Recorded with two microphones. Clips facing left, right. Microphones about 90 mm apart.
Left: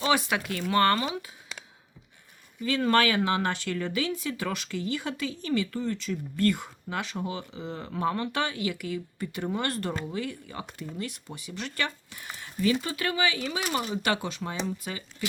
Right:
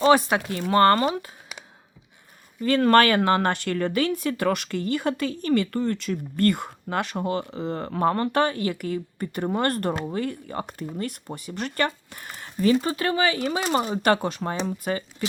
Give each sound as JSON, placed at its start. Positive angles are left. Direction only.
{"t": 0.0, "sound": "speech", "side_deg": -40}
{"t": 2.6, "sound": "speech", "side_deg": -55}